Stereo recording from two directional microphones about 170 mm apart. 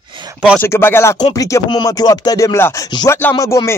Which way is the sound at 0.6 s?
15° left (ahead or behind).